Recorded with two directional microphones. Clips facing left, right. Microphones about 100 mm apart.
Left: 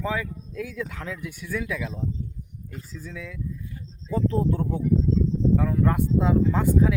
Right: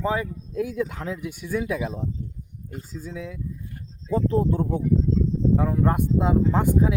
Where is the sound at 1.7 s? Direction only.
35° right (ahead or behind).